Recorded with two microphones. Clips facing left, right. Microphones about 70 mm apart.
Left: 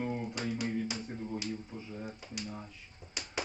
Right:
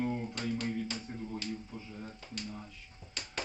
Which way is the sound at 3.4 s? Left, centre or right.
Centre.